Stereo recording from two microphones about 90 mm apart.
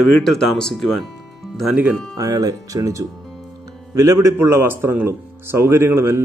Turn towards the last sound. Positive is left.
turn(degrees=-25)  # may be behind; listen again after turning